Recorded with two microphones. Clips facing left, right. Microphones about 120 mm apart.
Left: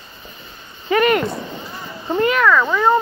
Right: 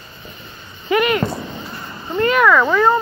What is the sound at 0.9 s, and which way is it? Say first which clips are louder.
Vehicle: left 1 dB; 40° left (ahead or behind).